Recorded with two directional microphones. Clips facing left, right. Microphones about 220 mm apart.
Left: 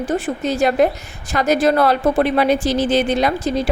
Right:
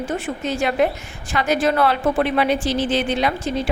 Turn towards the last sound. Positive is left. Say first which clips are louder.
# left 3 dB
turn(degrees=40)  # may be behind; listen again after turning